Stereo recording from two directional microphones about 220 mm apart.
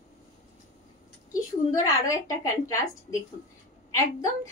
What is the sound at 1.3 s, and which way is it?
A woman's voice, 15° left (ahead or behind).